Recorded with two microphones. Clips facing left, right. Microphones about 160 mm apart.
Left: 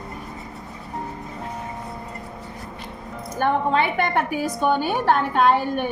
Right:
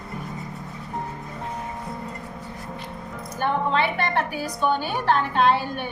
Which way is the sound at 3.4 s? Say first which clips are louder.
Left 3 dB; 50° left (ahead or behind).